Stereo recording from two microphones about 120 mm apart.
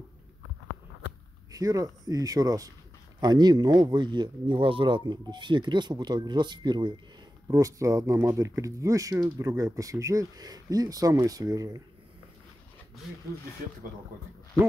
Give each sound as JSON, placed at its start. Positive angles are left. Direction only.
{"t": 1.5, "sound": "speech", "side_deg": -30}
{"t": 7.4, "sound": "speech", "side_deg": -25}